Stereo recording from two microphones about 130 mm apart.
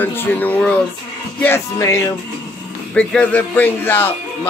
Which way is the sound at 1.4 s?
20° left (ahead or behind).